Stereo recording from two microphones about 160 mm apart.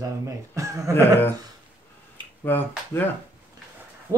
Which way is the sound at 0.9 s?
15° left (ahead or behind).